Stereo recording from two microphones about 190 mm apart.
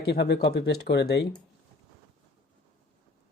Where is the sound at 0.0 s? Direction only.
60° left (ahead or behind).